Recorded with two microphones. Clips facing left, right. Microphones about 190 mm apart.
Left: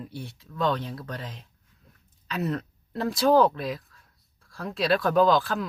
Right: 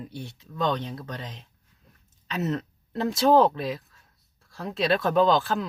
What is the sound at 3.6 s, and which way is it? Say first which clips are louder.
Speech: right 1 dB; centre (ahead or behind).